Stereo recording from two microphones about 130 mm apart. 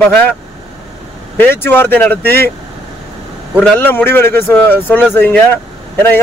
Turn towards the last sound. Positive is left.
turn(degrees=15)  # may be behind; listen again after turning